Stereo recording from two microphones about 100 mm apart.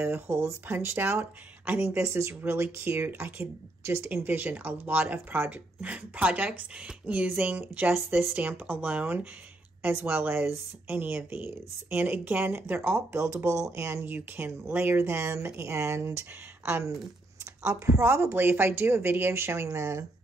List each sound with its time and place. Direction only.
0.0 s speech: 25° right (ahead or behind)